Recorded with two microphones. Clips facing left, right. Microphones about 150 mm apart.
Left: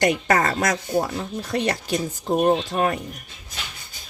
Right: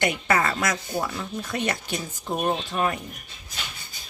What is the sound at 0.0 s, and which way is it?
Speech, 40° left (ahead or behind).